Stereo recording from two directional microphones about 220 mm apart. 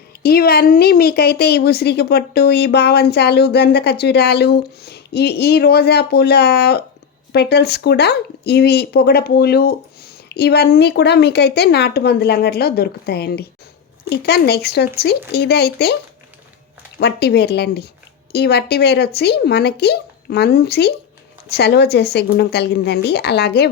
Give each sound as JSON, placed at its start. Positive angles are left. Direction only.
{"t": 0.2, "sound": "a woman's voice", "side_deg": 45}
{"t": 17.0, "sound": "a woman's voice", "side_deg": 50}